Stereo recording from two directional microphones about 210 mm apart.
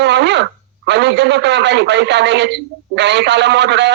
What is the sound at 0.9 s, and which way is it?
A man's voice, 55° right (ahead or behind).